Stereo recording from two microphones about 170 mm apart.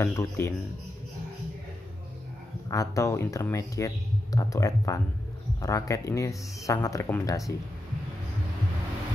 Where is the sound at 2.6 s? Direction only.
20° left (ahead or behind).